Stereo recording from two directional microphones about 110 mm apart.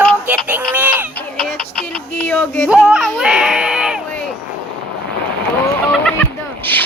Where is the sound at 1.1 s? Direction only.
10° left (ahead or behind).